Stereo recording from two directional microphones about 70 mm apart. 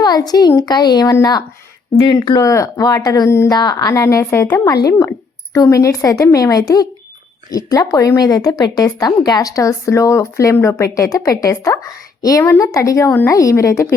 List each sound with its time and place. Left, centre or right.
0.0 s a child's voice: left
2.4 s speech: left
3.2 s a woman's voice: left
3.5 s a child's voice: left
3.9 s a woman's voice: left